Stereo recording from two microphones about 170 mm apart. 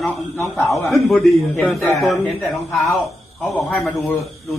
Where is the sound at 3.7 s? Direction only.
10° left (ahead or behind).